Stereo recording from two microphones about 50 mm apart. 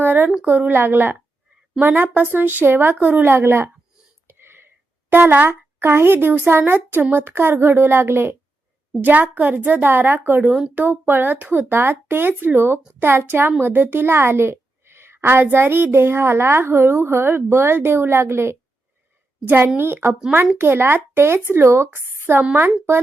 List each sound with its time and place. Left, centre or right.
0.0 s a sound: right
0.4 s a woman's voice: right
4.3 s a sound: right
5.5 s a woman's voice: right
9.0 s a woman's voice: right
9.9 s a woman's voice: right
11.7 s a woman's voice: right
19.5 s a woman's voice: right